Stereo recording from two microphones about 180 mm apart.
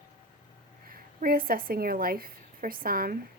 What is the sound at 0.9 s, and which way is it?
A woman's voice, 55° right (ahead or behind).